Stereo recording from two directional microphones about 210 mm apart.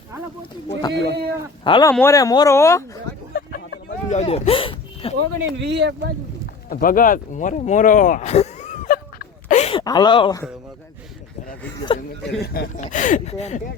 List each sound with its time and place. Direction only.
0.7 s speech: 20° left (ahead or behind)
0.9 s speech: 50° right (ahead or behind)
1.6 s speech: 25° left (ahead or behind)
1.9 s speech: 10° left (ahead or behind)
3.3 s vehicle: 50° left (ahead or behind)
4.1 s speech: 30° left (ahead or behind)
5.1 s speech: 55° right (ahead or behind)
6.7 s a sound: 40° left (ahead or behind)
9.8 s speech: 20° left (ahead or behind)
12.4 s speech: 45° left (ahead or behind)
12.8 s speech: 35° left (ahead or behind)